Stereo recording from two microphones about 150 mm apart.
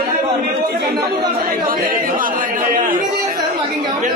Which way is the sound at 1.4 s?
75° right (ahead or behind).